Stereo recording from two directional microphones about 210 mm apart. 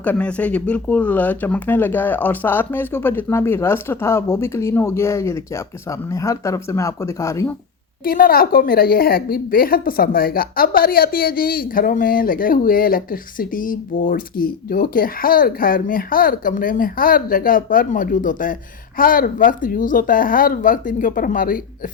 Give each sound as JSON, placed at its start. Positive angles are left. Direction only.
{"t": 0.0, "sound": "speech", "side_deg": 5}
{"t": 8.0, "sound": "a woman's voice", "side_deg": 45}